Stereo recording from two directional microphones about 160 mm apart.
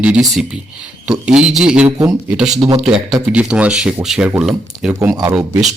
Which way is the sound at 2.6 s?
25° right (ahead or behind).